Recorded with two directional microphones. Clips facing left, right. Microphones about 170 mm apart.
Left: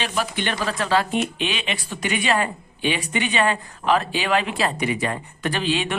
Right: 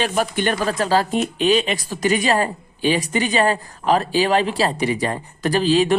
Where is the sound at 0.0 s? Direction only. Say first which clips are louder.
Right 5 dB; 45° right (ahead or behind).